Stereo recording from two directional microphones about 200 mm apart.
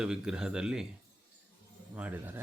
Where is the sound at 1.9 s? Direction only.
10° right (ahead or behind).